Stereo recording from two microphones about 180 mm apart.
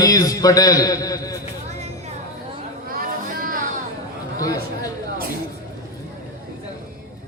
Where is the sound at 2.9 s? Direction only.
50° right (ahead or behind).